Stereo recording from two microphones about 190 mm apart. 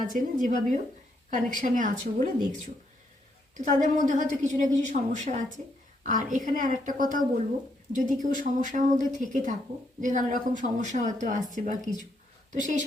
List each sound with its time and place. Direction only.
0.0 s speech: 45° right (ahead or behind)
3.6 s a woman's voice: 40° right (ahead or behind)